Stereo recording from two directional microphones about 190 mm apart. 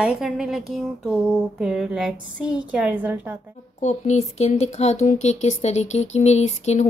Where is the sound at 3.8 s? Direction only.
35° left (ahead or behind).